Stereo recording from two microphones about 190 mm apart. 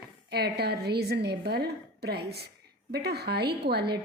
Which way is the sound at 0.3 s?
55° right (ahead or behind).